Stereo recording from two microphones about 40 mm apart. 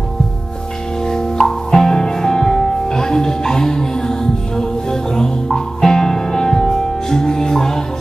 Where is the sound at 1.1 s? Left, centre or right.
Centre.